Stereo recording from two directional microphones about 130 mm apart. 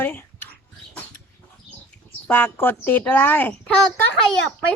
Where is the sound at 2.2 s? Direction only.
15° left (ahead or behind).